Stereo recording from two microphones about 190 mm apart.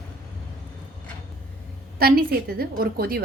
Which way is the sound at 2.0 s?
55° right (ahead or behind).